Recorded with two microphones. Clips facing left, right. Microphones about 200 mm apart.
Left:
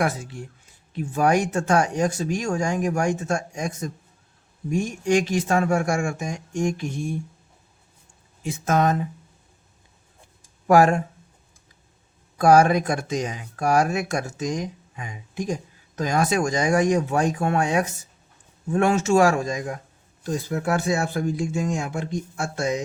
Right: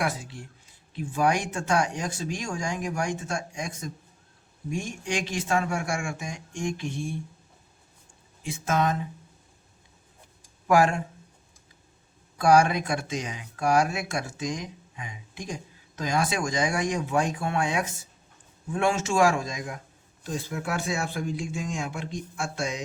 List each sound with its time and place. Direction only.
0.9 s speech: 45° left (ahead or behind)
8.6 s speech: 45° left (ahead or behind)
10.7 s speech: 40° left (ahead or behind)
12.4 s speech: 45° left (ahead or behind)